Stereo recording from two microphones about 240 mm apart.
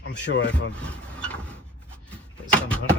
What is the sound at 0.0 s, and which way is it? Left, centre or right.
Speech, left.